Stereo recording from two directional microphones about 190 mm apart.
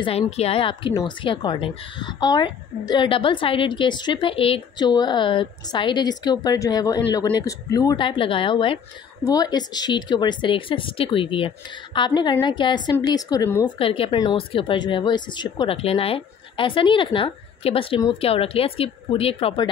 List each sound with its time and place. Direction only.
0.0 s a woman's voice: 30° left (ahead or behind)
13.7 s a woman's voice: 30° left (ahead or behind)